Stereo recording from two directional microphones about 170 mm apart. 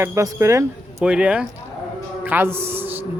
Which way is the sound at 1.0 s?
5° right (ahead or behind).